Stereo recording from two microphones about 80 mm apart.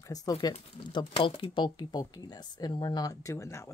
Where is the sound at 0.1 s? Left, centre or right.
Left.